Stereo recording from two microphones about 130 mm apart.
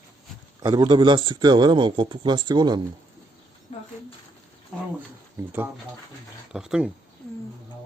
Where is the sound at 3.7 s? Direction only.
60° left (ahead or behind).